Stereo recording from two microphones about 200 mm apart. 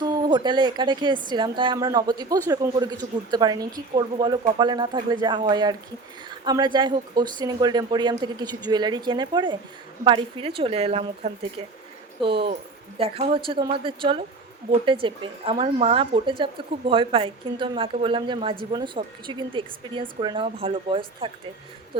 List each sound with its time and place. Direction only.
0.0 s a woman's voice: 20° right (ahead or behind)